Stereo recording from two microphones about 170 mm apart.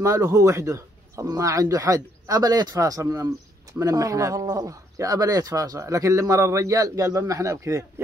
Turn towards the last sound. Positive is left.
turn(degrees=-20)  # may be behind; listen again after turning